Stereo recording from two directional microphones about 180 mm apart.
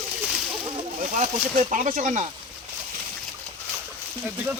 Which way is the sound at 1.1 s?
40° right (ahead or behind).